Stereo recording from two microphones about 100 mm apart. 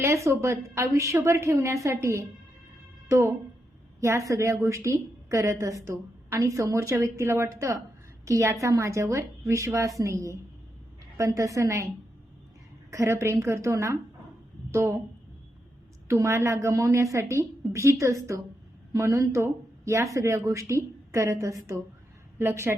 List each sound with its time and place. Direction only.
0.0 s a woman's voice: 30° right (ahead or behind)
12.9 s a woman's voice: 30° right (ahead or behind)
16.0 s a woman's voice: 30° right (ahead or behind)